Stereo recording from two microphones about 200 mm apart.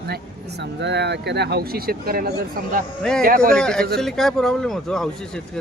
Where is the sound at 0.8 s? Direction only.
60° right (ahead or behind).